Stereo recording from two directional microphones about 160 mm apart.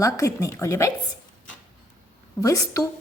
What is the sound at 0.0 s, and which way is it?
Speech, 20° left (ahead or behind).